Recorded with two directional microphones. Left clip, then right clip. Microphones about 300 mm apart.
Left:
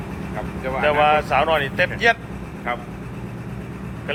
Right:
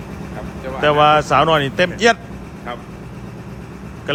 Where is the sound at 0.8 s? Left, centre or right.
Right.